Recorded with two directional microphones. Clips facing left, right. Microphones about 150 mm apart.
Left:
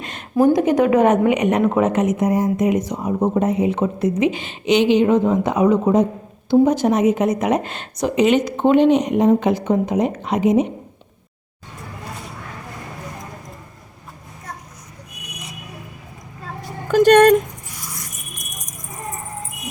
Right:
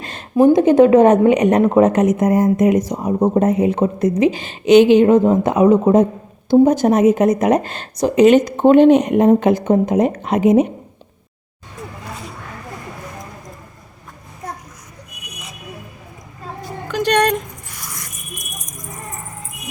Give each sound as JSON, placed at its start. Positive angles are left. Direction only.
{"t": 0.0, "sound": "a sound", "side_deg": -35}
{"t": 0.3, "sound": "a woman's voice", "side_deg": -25}
{"t": 16.9, "sound": "speech", "side_deg": 45}